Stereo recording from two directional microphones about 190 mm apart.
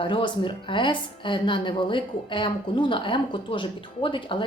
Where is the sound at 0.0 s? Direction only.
25° left (ahead or behind).